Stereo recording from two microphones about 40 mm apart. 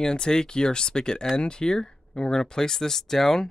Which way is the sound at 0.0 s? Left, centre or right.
Centre.